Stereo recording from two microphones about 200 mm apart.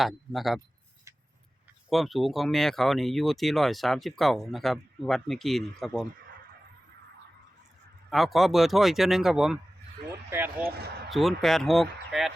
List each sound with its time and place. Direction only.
0.0 s speech: centre (ahead or behind)
1.9 s speech: centre (ahead or behind)
8.1 s speech: centre (ahead or behind)
10.6 s speech: 50° right (ahead or behind)
11.1 s speech: centre (ahead or behind)